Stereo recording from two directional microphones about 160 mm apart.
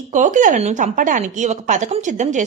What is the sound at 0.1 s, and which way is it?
Speech, 55° right (ahead or behind).